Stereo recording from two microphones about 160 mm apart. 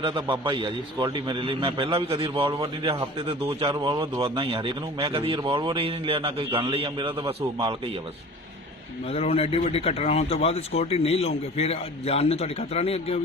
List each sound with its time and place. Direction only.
0.0 s a man's voice: 30° right (ahead or behind)
9.0 s speech: 40° left (ahead or behind)